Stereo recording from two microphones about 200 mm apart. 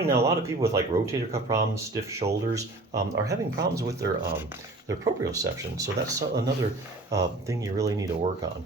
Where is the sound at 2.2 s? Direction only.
35° right (ahead or behind).